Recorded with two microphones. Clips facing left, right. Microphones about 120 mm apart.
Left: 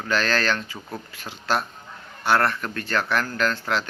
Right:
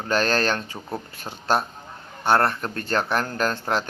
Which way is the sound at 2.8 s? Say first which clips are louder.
Right 1 dB; 40° right (ahead or behind).